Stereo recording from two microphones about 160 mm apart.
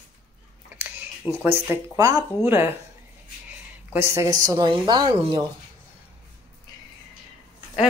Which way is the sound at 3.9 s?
20° right (ahead or behind).